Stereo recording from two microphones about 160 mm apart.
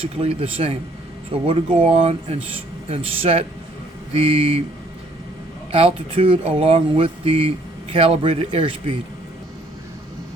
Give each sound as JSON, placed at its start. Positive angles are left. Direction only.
{"t": 0.1, "sound": "speech", "side_deg": -40}
{"t": 5.7, "sound": "speech", "side_deg": -35}